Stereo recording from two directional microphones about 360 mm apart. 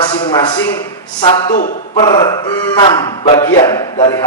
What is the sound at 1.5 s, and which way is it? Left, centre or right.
Speech, left.